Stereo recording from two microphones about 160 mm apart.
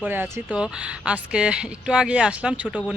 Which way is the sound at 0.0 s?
10° right (ahead or behind).